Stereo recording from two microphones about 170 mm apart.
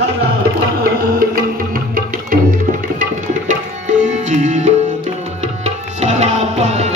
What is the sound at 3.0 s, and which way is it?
Music, 45° right (ahead or behind).